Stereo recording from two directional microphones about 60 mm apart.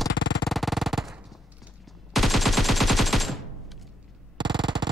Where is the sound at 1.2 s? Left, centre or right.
Centre.